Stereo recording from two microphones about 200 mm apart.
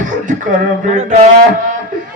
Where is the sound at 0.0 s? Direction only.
40° right (ahead or behind).